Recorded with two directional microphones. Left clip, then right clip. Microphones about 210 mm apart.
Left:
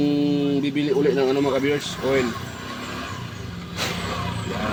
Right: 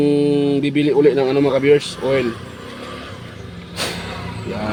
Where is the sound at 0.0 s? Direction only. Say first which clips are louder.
Right 6 dB; 50° right (ahead or behind).